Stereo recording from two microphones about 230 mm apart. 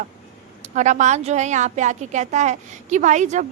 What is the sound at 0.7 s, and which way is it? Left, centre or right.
A woman's voice, right.